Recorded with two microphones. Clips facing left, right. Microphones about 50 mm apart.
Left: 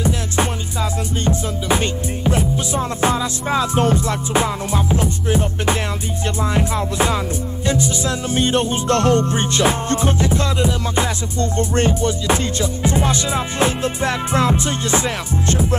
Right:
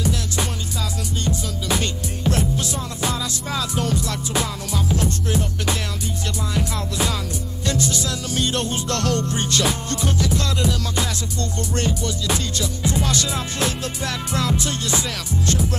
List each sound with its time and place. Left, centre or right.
1.2 s music: left
3.0 s music: left